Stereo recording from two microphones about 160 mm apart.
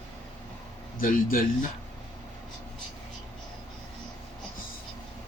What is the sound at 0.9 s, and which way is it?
Speech, 60° left (ahead or behind).